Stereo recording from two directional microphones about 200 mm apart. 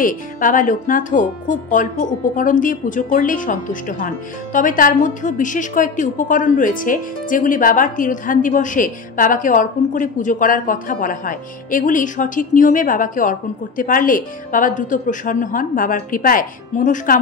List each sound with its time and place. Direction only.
0.0 s speech: 40° left (ahead or behind)